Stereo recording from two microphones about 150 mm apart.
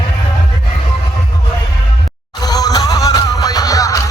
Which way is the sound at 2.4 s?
25° left (ahead or behind).